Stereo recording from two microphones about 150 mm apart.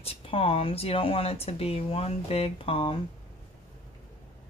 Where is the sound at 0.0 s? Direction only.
40° left (ahead or behind).